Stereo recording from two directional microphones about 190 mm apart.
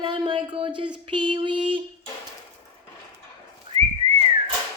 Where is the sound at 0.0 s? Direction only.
25° right (ahead or behind).